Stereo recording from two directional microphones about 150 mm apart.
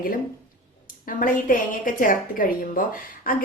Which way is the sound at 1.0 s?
65° left (ahead or behind).